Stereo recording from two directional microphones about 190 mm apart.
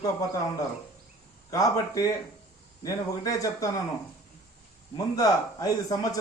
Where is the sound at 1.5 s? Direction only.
20° left (ahead or behind).